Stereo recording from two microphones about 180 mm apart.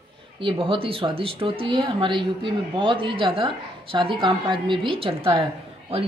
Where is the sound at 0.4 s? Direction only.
30° right (ahead or behind).